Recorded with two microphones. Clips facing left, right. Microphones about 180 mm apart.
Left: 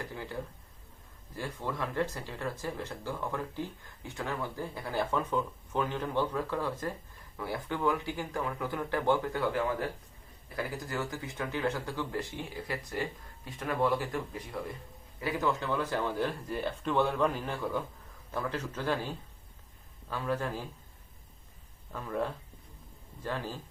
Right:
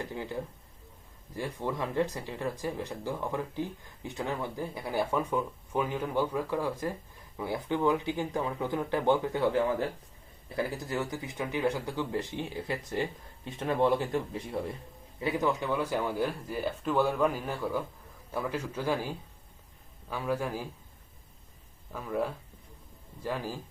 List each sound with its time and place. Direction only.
0.0 s speech: 20° right (ahead or behind)
21.9 s speech: 5° right (ahead or behind)